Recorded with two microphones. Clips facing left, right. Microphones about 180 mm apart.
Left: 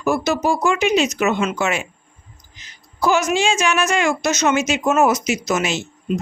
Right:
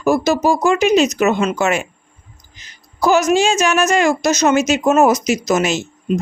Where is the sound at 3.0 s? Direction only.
40° right (ahead or behind).